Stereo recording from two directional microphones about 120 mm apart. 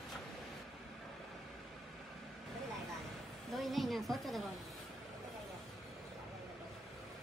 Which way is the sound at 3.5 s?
Centre (ahead or behind).